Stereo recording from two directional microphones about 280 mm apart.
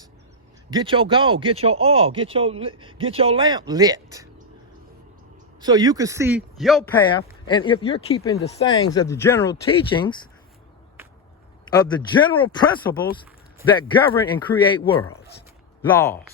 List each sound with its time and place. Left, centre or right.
0.7 s speech: centre
5.5 s a man's voice: centre
7.0 s speech: centre
11.7 s speech: centre